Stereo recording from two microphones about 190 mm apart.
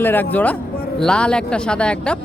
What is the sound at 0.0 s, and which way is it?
A woman's voice, 10° left (ahead or behind).